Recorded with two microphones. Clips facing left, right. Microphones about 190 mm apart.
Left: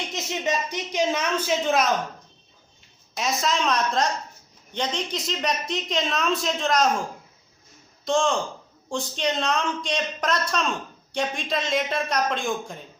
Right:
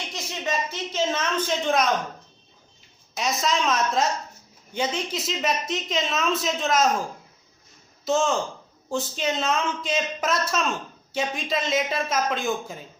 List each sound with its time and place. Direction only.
0.1 s speech: 20° left (ahead or behind); by 1.9 s 5° left (ahead or behind)
3.2 s speech: centre (ahead or behind)
8.0 s speech: 5° right (ahead or behind)